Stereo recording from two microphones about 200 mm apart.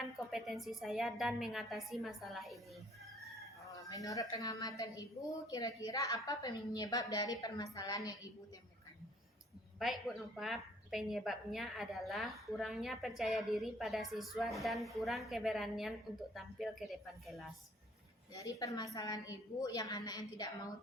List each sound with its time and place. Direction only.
0.2 s a woman's voice: centre (ahead or behind)
3.7 s a woman's voice: 15° left (ahead or behind)
9.7 s a woman's voice: centre (ahead or behind)
18.3 s a woman's voice: 15° left (ahead or behind)